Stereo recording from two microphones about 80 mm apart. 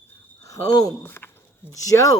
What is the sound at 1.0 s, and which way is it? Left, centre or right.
Speech, left.